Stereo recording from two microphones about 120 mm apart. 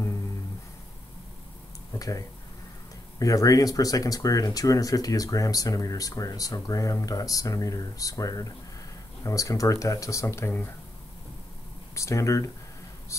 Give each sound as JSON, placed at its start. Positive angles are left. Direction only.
{"t": 2.0, "sound": "speech", "side_deg": 30}
{"t": 11.9, "sound": "speech", "side_deg": 25}